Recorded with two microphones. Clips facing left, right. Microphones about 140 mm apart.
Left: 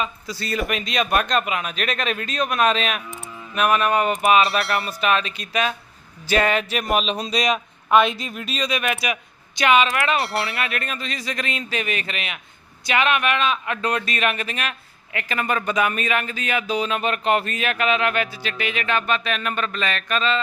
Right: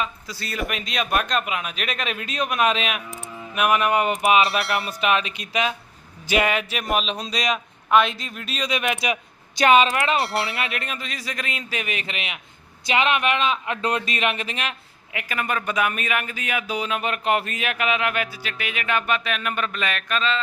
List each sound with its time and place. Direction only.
0.0 s a man's voice: centre (ahead or behind); by 4.4 s 20° right (ahead or behind)
4.4 s speech: centre (ahead or behind)
4.9 s a man's voice: 15° right (ahead or behind); by 8.6 s centre (ahead or behind)
8.6 s a man's voice: 20° right (ahead or behind)
9.6 s a woman's voice: 35° right (ahead or behind)
10.2 s speech: centre (ahead or behind)
10.5 s a man's voice: 20° right (ahead or behind); by 20.4 s centre (ahead or behind)